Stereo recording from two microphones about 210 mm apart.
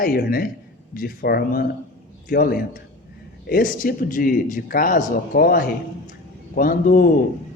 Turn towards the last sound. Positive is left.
turn(degrees=40)  # may be behind; listen again after turning